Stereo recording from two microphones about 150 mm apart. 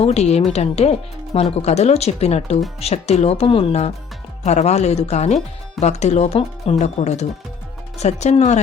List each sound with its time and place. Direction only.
0.0 s speech: 45° left (ahead or behind)